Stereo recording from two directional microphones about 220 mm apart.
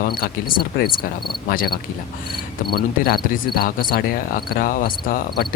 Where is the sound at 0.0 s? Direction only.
40° left (ahead or behind).